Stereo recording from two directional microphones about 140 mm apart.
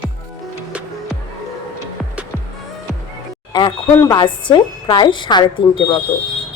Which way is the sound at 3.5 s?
30° left (ahead or behind).